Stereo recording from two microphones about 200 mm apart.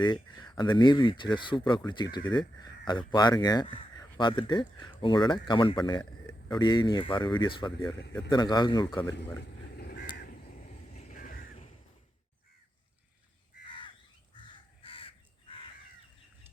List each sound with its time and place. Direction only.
0.0 s speech: 20° left (ahead or behind)
9.7 s crow: 50° left (ahead or behind)
10.9 s a sound: 40° left (ahead or behind)
13.7 s crow: 25° left (ahead or behind)